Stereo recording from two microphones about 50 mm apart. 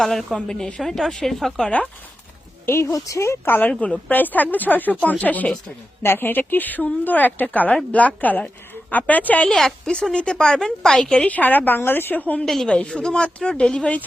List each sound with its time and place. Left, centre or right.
0.0 s a woman's voice: centre
2.6 s speech: left
3.4 s a woman's voice: left
3.7 s a woman's voice: left
6.0 s a woman's voice: left
9.5 s speech: centre
11.3 s a woman's voice: left
11.8 s speech: left
12.6 s speech: left